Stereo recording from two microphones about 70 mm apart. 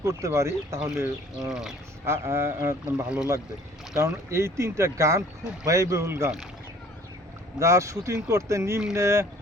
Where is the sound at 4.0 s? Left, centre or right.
Right.